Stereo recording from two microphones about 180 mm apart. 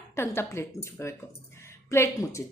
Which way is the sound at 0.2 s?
15° left (ahead or behind).